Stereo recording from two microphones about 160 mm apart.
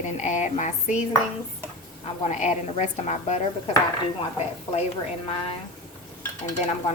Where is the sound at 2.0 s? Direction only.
45° left (ahead or behind).